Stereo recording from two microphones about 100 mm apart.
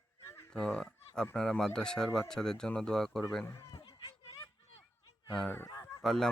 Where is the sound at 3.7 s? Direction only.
60° left (ahead or behind).